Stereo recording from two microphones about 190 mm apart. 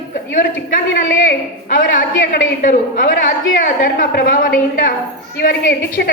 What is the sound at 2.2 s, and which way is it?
Speech, 50° left (ahead or behind).